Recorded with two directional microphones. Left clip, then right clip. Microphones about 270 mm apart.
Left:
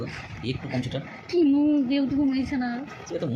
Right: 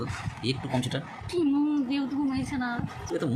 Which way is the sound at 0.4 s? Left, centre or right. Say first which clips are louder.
Right 1 dB; right.